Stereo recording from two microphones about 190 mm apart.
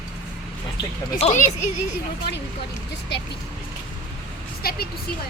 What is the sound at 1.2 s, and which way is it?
Speech, 35° left (ahead or behind).